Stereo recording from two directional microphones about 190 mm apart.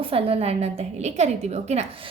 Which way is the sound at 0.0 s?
30° right (ahead or behind).